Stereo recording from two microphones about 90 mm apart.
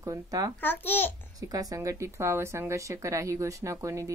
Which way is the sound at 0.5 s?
20° left (ahead or behind).